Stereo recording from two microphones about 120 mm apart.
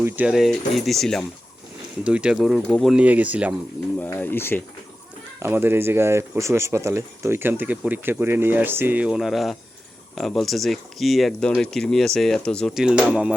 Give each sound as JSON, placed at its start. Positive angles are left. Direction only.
{"t": 0.3, "sound": "speech", "side_deg": 0}
{"t": 2.0, "sound": "speech", "side_deg": -10}
{"t": 2.9, "sound": "speech", "side_deg": -10}
{"t": 3.9, "sound": "speech", "side_deg": 15}
{"t": 5.4, "sound": "speech", "side_deg": -20}
{"t": 12.7, "sound": "speech", "side_deg": -5}